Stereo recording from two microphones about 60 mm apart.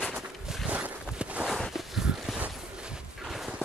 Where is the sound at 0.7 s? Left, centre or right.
Right.